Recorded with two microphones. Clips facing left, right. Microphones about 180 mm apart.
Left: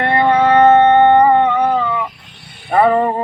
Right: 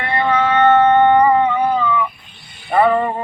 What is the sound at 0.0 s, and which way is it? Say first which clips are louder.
Music: left 5 dB; 35° left (ahead or behind).